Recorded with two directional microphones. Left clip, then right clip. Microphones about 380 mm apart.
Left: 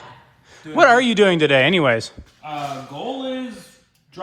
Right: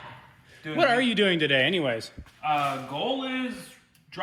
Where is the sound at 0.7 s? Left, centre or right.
Centre.